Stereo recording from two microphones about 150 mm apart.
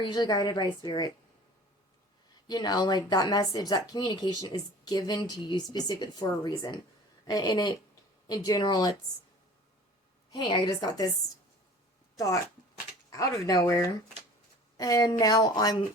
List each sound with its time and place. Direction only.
0.0 s speech: 30° left (ahead or behind)
2.5 s speech: 30° left (ahead or behind)
10.3 s speech: 30° left (ahead or behind)
12.1 s speech: 25° left (ahead or behind)